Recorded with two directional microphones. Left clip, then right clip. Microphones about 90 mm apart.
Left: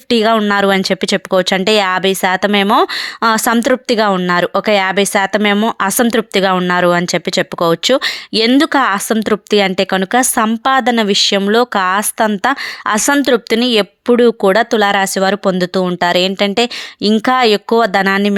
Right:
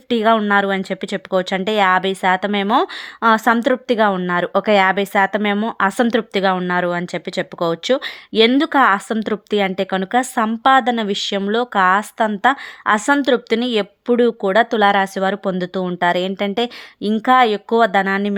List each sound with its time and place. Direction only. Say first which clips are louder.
0.1 s speech: left 3 dB; 25° left (ahead or behind)